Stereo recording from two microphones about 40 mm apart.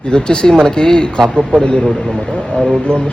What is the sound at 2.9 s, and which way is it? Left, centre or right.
Speech, left.